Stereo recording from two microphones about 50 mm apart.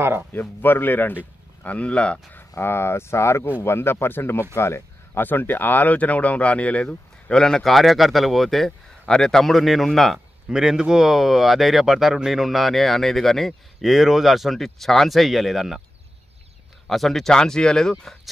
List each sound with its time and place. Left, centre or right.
0.0 s a man's voice: right
0.3 s speech: left
2.5 s speech: left
5.2 s speech: left
7.2 s speech: centre
7.6 s speech: centre
10.5 s speech: centre
16.9 s speech: centre